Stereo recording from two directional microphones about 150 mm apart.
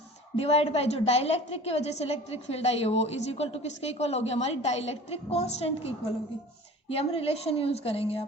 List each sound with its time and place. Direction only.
0.3 s a woman's voice: 45° left (ahead or behind)
6.9 s a woman's voice: 40° left (ahead or behind)